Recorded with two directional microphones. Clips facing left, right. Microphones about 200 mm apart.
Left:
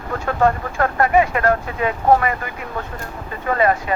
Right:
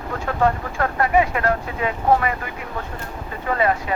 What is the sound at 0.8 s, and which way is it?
Speech, 50° left (ahead or behind).